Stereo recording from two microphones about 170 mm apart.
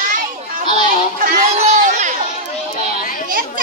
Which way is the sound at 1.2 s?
45° right (ahead or behind).